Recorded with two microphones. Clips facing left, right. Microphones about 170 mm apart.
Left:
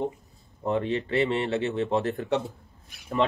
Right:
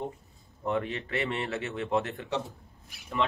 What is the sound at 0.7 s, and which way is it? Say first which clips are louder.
Speech: left 4 dB; 35° left (ahead or behind).